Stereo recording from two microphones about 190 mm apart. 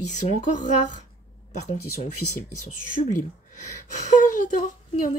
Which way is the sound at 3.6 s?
40° left (ahead or behind).